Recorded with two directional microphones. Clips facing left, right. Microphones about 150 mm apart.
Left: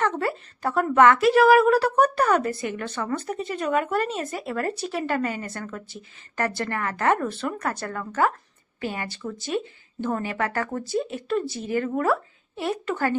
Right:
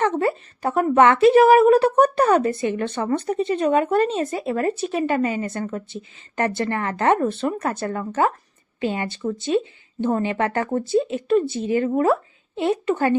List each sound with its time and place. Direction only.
0.0 s a woman's voice: 20° right (ahead or behind)